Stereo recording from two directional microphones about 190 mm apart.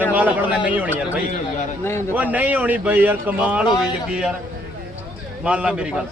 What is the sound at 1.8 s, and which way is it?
Speech, 15° left (ahead or behind).